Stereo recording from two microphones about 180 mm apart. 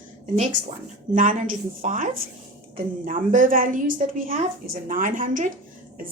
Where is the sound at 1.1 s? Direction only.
45° right (ahead or behind).